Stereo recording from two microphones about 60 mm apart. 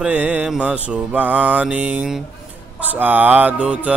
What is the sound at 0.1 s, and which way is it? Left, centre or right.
Music, right.